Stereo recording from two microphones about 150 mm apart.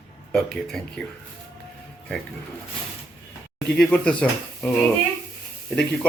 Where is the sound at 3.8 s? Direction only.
5° left (ahead or behind).